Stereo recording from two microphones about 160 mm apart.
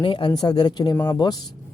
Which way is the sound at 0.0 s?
30° left (ahead or behind).